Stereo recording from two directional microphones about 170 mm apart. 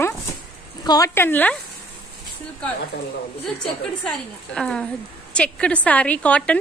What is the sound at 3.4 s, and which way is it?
A woman's voice, 5° left (ahead or behind).